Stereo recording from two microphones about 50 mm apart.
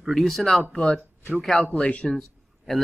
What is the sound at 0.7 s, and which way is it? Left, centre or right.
Speech, left.